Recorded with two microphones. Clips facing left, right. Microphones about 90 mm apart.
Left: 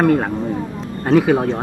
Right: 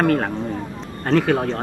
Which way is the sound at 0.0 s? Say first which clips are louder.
Left 3 dB; 10° left (ahead or behind).